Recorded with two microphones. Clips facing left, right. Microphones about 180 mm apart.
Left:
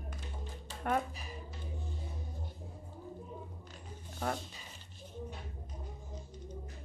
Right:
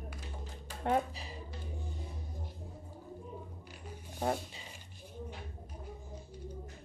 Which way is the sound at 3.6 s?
10° right (ahead or behind).